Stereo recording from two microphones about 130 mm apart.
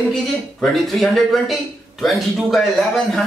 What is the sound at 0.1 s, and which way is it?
Speech, centre (ahead or behind).